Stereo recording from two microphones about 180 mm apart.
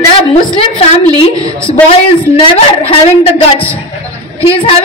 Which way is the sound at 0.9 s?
35° left (ahead or behind).